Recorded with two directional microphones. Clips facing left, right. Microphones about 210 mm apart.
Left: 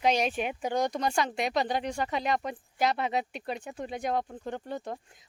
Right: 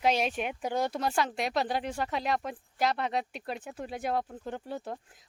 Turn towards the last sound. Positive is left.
turn(degrees=-5)  # may be behind; listen again after turning